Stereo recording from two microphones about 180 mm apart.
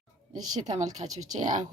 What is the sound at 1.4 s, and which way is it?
Speech, 45° right (ahead or behind).